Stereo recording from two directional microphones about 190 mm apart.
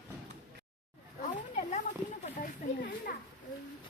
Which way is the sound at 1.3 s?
40° left (ahead or behind).